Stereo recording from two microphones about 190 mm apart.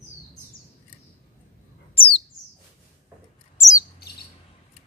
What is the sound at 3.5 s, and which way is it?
Bird, 15° left (ahead or behind).